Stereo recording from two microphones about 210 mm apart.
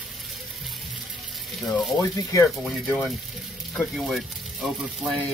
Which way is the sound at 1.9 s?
15° left (ahead or behind).